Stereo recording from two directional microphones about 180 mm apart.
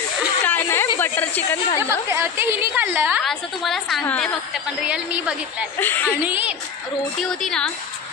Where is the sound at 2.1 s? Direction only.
15° right (ahead or behind).